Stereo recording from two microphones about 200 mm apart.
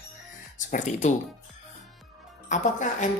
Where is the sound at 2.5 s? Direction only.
40° left (ahead or behind).